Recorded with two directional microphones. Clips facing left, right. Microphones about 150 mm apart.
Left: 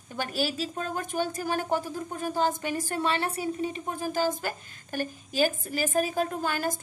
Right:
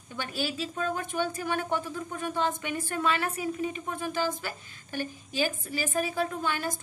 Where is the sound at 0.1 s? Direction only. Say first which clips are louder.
Left 3 dB; 40° left (ahead or behind).